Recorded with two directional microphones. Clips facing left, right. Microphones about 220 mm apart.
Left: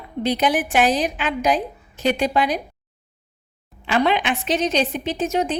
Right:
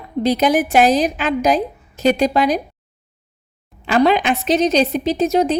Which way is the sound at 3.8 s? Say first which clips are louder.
Right 5 dB; 40° right (ahead or behind).